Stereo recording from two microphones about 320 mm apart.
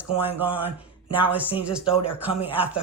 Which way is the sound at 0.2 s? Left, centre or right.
Centre.